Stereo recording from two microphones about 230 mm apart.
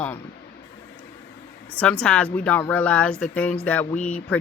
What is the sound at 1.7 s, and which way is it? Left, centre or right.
Speech, centre.